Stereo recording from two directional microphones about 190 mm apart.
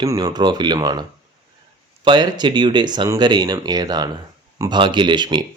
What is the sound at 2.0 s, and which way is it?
Speech, 25° right (ahead or behind).